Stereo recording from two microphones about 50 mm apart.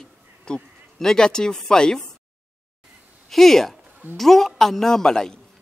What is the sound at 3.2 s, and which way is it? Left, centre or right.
A woman's voice, centre.